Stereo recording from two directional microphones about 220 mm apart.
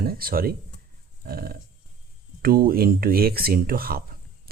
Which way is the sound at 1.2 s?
45° right (ahead or behind).